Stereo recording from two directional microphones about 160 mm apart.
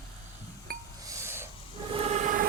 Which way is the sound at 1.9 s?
40° right (ahead or behind).